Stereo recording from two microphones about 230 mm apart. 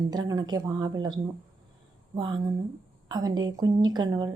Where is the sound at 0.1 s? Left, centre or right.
Centre.